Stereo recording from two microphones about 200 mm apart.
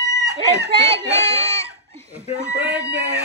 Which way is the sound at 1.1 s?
30° right (ahead or behind).